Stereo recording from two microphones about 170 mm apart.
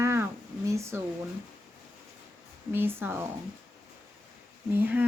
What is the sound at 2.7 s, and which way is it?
Speech, 15° right (ahead or behind).